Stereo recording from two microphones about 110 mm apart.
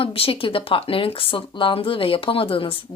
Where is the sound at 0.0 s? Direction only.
55° left (ahead or behind).